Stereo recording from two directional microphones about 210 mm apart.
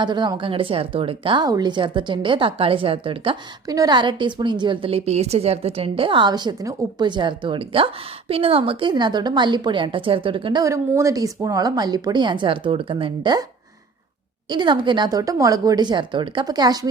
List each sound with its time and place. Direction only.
0.0 s a woman's voice: 20° right (ahead or behind)
14.5 s a woman's voice: 20° right (ahead or behind)